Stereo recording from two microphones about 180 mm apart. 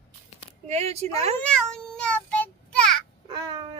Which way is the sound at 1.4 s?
5° left (ahead or behind).